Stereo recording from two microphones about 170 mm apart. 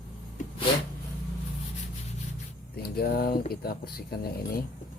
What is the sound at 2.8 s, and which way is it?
Speech, 60° left (ahead or behind).